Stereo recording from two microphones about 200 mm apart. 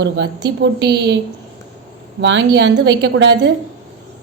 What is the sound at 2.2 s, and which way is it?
A woman's voice, 65° right (ahead or behind).